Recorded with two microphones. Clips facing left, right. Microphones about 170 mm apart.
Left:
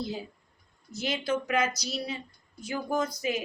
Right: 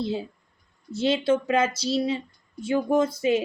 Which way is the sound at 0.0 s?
25° right (ahead or behind).